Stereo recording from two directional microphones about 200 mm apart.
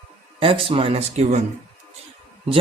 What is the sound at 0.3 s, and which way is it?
Speech, 25° right (ahead or behind).